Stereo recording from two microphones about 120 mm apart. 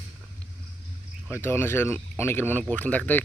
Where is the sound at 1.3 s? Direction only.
20° left (ahead or behind).